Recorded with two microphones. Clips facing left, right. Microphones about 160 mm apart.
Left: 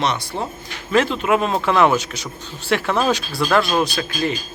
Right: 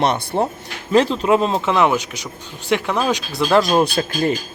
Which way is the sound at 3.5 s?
35° right (ahead or behind).